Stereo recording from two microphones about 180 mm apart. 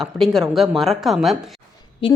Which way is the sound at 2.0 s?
30° left (ahead or behind).